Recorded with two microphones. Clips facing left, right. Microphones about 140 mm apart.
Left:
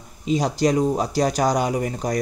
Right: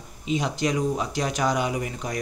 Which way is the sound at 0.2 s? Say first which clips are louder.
Left 5 dB; 40° left (ahead or behind).